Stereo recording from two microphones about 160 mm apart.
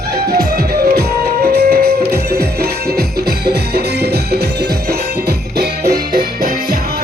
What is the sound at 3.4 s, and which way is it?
Music, 80° right.